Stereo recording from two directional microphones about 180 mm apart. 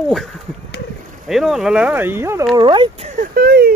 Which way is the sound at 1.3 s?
Centre (ahead or behind).